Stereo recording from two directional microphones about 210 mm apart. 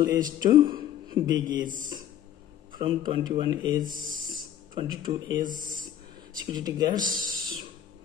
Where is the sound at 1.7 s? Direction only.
40° right (ahead or behind).